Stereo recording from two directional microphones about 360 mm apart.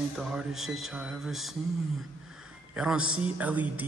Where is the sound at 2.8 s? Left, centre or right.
Centre.